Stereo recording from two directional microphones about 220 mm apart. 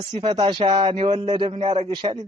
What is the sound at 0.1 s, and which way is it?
Speech, 20° right (ahead or behind).